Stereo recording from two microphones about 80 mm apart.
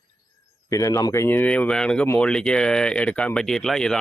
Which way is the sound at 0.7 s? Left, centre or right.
Left.